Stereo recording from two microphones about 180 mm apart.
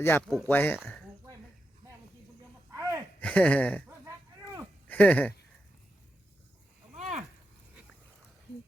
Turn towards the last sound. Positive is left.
turn(degrees=-40)  # may be behind; listen again after turning